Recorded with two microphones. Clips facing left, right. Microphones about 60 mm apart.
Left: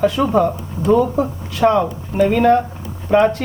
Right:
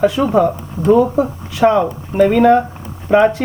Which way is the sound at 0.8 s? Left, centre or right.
Right.